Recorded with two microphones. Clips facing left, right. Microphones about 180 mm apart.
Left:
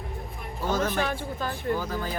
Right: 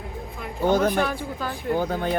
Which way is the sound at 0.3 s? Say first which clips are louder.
Right 7 dB; 75° right (ahead or behind).